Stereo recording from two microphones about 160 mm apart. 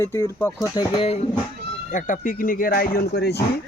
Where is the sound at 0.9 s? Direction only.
40° left (ahead or behind).